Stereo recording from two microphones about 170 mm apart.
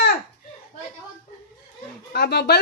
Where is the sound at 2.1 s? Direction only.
75° left (ahead or behind).